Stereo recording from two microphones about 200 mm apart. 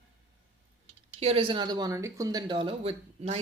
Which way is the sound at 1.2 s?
30° right (ahead or behind).